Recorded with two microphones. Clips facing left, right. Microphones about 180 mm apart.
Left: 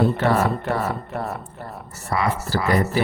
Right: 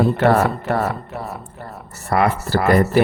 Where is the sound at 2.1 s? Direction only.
60° right (ahead or behind).